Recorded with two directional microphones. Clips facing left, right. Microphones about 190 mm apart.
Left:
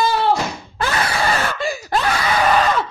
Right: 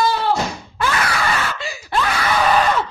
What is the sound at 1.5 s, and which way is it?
Screaming, 45° left (ahead or behind).